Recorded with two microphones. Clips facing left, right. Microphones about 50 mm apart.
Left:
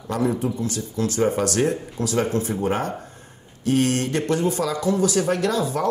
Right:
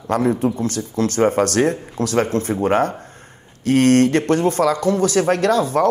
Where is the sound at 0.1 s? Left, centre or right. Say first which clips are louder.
Right 5 dB; right.